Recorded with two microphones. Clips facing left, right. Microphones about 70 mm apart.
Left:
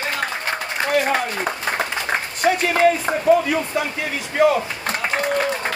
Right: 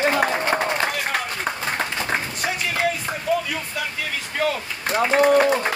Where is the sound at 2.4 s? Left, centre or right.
Left.